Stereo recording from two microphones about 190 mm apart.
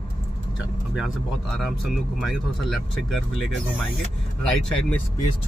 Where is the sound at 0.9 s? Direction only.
Centre (ahead or behind).